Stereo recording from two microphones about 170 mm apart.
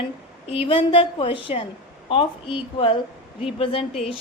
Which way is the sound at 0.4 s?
35° left (ahead or behind).